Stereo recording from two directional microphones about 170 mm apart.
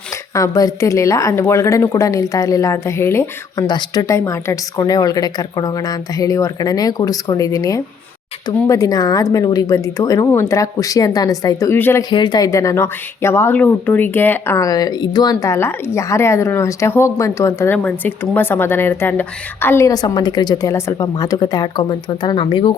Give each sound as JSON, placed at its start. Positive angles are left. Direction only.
{"t": 0.3, "sound": "speech", "side_deg": 20}
{"t": 12.1, "sound": "speech", "side_deg": 25}